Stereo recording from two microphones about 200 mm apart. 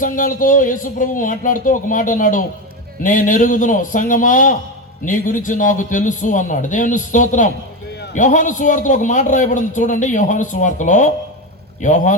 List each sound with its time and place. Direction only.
0.0 s a man's voice: 40° left (ahead or behind)